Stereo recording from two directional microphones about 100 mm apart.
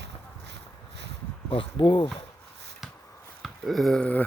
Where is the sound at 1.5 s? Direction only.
60° left (ahead or behind).